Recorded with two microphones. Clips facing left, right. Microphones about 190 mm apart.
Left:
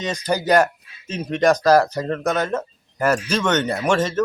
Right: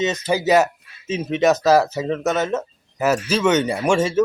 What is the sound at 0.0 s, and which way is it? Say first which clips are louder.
Speech: right 3 dB; 5° right (ahead or behind).